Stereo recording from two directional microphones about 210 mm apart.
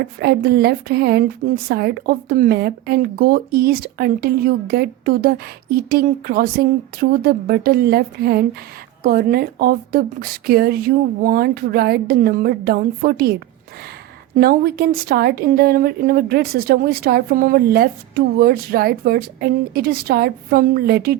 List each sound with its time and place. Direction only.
0.0 s a woman's voice: 50° right (ahead or behind)
14.3 s a woman's voice: 45° right (ahead or behind)